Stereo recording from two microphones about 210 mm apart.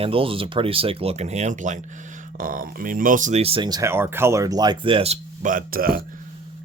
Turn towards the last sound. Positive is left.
turn(degrees=-45)  # may be behind; listen again after turning